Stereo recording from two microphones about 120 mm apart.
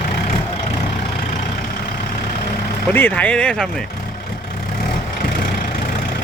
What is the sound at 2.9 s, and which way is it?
Speech, 15° left (ahead or behind).